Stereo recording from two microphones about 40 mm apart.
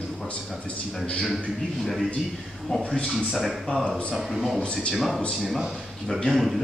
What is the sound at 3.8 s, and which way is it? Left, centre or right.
Speech, left.